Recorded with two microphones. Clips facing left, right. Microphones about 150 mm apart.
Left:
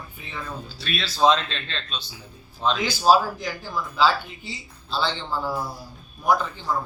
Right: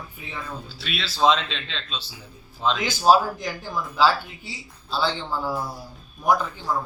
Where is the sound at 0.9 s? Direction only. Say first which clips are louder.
Left 1 dB; centre (ahead or behind).